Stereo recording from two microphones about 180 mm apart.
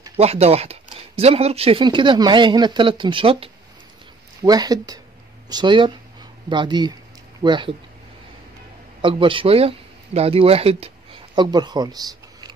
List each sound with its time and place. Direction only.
0.2 s speech: 35° right (ahead or behind)
9.0 s speech: 30° right (ahead or behind)